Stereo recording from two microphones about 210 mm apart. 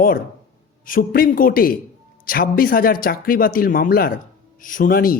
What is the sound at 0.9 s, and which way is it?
Speech, 45° left (ahead or behind).